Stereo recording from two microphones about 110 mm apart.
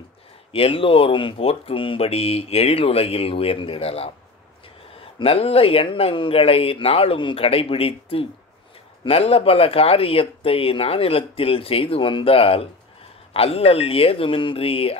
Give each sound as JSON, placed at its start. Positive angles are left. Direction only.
{"t": 0.5, "sound": "speech", "side_deg": 60}
{"t": 5.2, "sound": "speech", "side_deg": 60}